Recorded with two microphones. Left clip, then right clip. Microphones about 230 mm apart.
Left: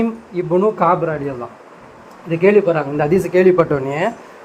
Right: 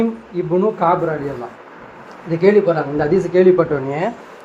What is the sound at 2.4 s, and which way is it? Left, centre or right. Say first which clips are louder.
Speech: even; left.